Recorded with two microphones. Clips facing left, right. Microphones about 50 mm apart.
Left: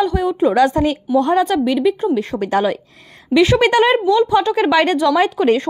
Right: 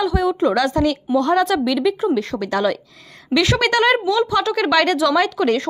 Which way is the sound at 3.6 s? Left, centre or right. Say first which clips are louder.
Left 3 dB; left.